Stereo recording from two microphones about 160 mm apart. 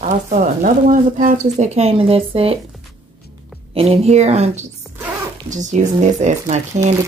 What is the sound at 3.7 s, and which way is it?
Speech, 40° right (ahead or behind).